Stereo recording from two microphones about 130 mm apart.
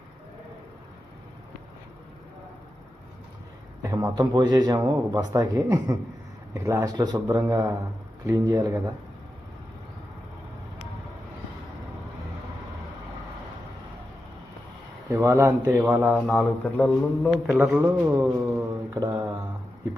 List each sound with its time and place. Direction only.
3.8 s speech: 25° right (ahead or behind)
6.9 s mantra: 30° right (ahead or behind)
7.3 s speech: 20° right (ahead or behind)
15.1 s speech: 20° right (ahead or behind); by 16.5 s 5° right (ahead or behind)
16.7 s a man's voice: 10° left (ahead or behind)
17.6 s speech: 10° right (ahead or behind)
18.0 s a sound: 15° right (ahead or behind)
18.9 s mantra: 30° right (ahead or behind)